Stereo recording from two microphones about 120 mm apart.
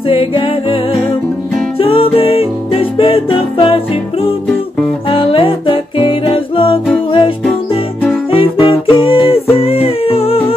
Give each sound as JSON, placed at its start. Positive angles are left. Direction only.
{"t": 0.1, "sound": "music", "side_deg": 50}
{"t": 1.8, "sound": "music", "side_deg": 50}